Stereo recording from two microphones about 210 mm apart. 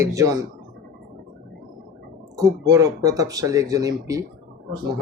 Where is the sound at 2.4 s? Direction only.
15° right (ahead or behind).